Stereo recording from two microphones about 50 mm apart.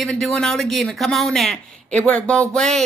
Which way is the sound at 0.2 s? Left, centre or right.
Centre.